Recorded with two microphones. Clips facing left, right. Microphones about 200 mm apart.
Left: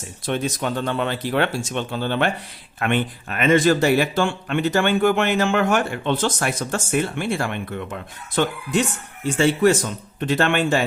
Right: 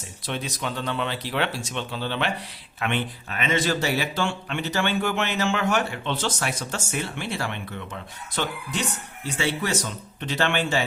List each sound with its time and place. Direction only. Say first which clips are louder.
0.3 s speech: left 7 dB; 50° left (ahead or behind)